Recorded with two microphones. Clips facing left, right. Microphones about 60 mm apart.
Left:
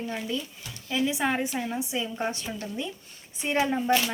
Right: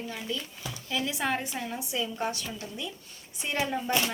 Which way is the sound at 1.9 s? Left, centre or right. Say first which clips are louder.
Left 1 dB; left.